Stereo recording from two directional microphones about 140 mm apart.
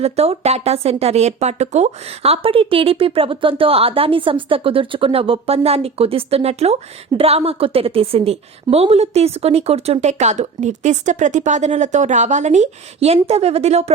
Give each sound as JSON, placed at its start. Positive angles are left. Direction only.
{"t": 0.0, "sound": "a woman's voice", "side_deg": -50}